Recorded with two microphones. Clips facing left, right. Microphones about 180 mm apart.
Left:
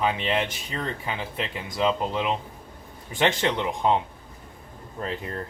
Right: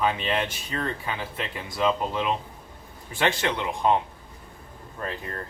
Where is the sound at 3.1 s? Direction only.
20° left (ahead or behind).